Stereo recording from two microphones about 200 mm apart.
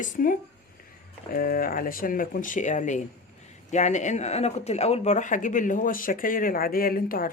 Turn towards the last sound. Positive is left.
turn(degrees=45)  # may be behind; listen again after turning